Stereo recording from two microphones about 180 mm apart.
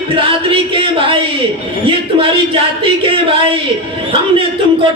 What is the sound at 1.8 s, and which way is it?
A man's voice, 30° right (ahead or behind).